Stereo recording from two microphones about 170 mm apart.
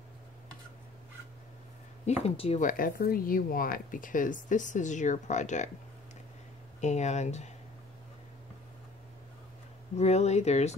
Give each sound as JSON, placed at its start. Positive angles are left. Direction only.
{"t": 2.2, "sound": "speech", "side_deg": 35}
{"t": 2.6, "sound": "speech", "side_deg": 60}
{"t": 6.8, "sound": "speech", "side_deg": 45}
{"t": 9.9, "sound": "speech", "side_deg": 40}